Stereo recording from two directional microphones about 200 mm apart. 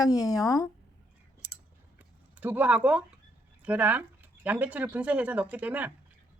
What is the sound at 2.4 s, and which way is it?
Speech, 10° right (ahead or behind).